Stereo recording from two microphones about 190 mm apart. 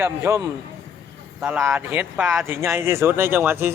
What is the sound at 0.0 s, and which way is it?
Speech, 15° right (ahead or behind).